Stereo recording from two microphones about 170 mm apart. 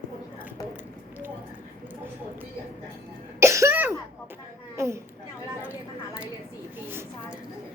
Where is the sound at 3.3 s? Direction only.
15° right (ahead or behind).